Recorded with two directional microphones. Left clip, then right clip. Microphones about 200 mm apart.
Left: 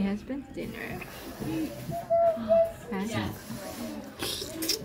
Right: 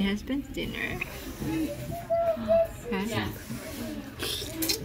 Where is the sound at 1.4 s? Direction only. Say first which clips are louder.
Right 2 dB; 40° left (ahead or behind).